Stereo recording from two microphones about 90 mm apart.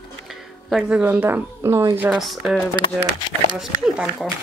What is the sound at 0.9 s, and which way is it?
A woman's voice, 20° right (ahead or behind).